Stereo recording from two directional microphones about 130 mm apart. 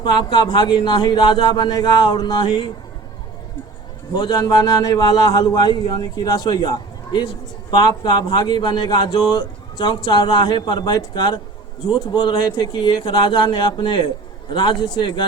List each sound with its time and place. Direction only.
0.0 s a man's voice: 35° left (ahead or behind)
4.1 s a man's voice: 30° left (ahead or behind)